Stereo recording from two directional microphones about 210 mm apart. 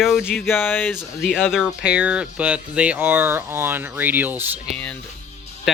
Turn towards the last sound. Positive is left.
turn(degrees=5)  # may be behind; listen again after turning